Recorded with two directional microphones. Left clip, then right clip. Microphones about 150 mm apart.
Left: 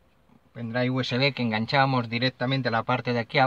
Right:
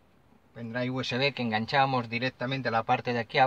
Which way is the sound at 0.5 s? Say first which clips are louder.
Left 5 dB; 15° right (ahead or behind).